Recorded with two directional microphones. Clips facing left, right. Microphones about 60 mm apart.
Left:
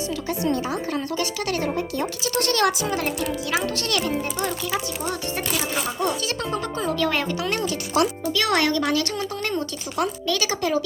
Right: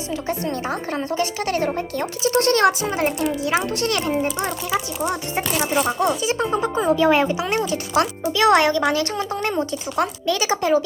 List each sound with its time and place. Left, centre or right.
0.3 s speech: right
2.2 s speech: right
5.5 s speech: right
6.1 s speech: centre